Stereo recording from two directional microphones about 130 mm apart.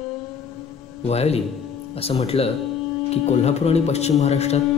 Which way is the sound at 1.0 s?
55° left (ahead or behind).